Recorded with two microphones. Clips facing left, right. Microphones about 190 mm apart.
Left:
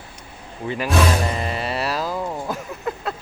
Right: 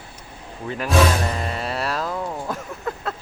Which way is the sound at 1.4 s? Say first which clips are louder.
Left 1 dB; 5° left (ahead or behind).